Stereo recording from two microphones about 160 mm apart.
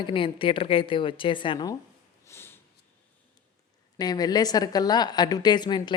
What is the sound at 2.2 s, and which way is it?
Sniff, 15° left (ahead or behind).